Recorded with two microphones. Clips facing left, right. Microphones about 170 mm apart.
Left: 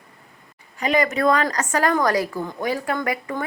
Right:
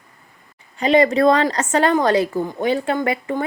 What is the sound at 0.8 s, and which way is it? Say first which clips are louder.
A woman's voice: right 6 dB; 30° right (ahead or behind).